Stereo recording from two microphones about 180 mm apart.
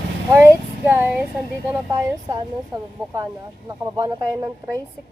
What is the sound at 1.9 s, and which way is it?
Speech, 20° right (ahead or behind).